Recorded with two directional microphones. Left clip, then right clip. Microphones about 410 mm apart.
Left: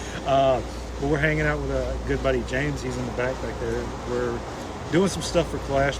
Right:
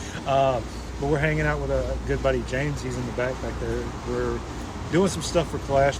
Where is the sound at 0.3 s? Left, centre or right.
Centre.